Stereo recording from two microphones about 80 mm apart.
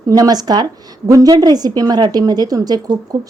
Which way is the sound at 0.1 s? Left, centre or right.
Right.